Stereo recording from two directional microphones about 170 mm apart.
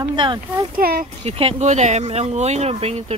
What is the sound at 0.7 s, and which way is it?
Speech, 60° right (ahead or behind).